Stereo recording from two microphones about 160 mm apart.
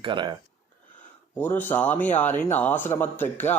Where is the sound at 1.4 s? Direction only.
10° left (ahead or behind).